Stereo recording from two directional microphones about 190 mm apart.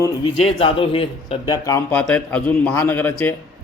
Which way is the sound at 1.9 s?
5° left (ahead or behind).